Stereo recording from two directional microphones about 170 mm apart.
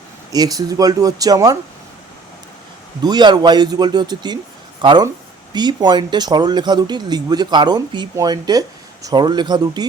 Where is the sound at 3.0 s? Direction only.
25° right (ahead or behind).